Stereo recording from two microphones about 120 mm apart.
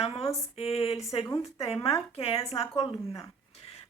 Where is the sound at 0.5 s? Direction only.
55° left (ahead or behind).